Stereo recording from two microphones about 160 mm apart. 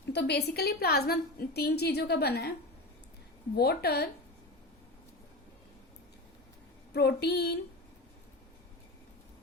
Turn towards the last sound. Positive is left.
turn(degrees=90)